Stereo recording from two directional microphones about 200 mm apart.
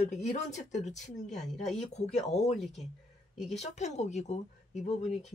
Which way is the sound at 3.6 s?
35° left (ahead or behind).